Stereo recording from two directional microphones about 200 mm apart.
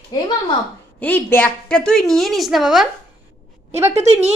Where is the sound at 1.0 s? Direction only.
10° left (ahead or behind).